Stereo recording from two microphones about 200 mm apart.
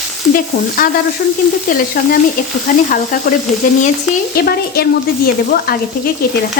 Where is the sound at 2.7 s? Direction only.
40° left (ahead or behind).